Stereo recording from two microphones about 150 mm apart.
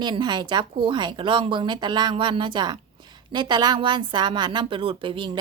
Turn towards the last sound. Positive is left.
turn(degrees=-35)  # may be behind; listen again after turning